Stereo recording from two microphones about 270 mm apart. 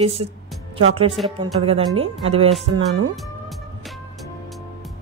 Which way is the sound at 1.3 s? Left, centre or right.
Centre.